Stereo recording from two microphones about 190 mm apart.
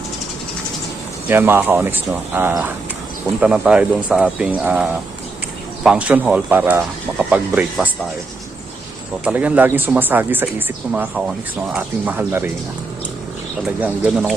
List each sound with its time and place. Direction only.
1.3 s speech: 10° right (ahead or behind)
9.2 s speech: 10° right (ahead or behind)
13.8 s speech: 5° right (ahead or behind)